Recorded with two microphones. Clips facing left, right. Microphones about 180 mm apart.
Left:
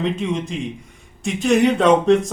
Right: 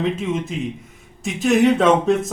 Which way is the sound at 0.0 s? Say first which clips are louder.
Even; centre (ahead or behind).